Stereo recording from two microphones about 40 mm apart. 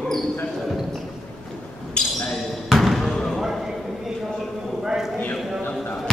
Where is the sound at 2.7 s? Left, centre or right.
Centre.